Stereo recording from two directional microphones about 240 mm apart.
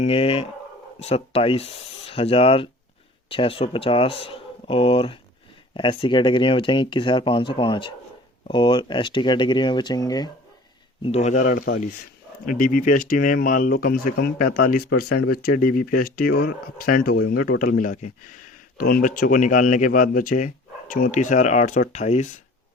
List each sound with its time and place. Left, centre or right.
0.0 s speech: left
11.0 s speech: left